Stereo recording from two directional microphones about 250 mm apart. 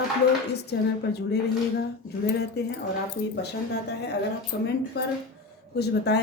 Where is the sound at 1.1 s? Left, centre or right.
Left.